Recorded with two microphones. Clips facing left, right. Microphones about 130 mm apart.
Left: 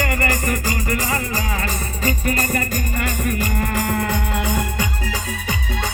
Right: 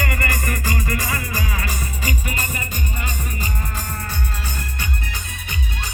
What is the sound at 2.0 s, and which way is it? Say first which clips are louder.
Music: left 8 dB; 40° left (ahead or behind).